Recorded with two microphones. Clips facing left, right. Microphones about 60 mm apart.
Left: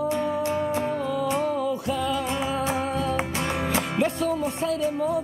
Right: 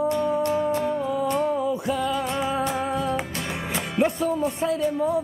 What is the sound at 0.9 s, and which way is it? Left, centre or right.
Music, centre.